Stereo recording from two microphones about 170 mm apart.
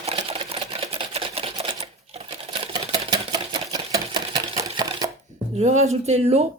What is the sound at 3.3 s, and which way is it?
Typewriter, 20° right (ahead or behind).